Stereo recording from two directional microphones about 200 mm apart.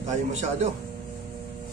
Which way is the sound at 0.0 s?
35° right (ahead or behind).